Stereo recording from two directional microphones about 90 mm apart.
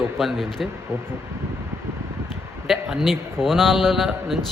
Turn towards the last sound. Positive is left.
turn(degrees=0)  # may be behind; listen again after turning